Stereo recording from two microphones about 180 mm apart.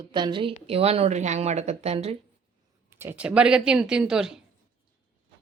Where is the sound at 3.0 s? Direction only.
10° right (ahead or behind).